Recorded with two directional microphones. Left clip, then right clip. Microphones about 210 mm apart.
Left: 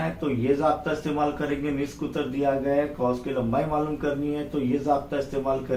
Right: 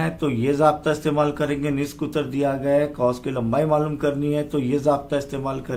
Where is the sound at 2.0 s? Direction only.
45° right (ahead or behind).